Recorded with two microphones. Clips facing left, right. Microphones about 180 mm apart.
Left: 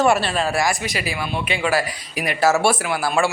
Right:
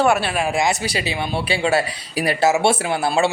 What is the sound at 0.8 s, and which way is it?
Speech, 30° right (ahead or behind).